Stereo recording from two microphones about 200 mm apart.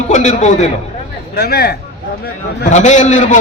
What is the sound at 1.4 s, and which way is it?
Speech, 50° left (ahead or behind).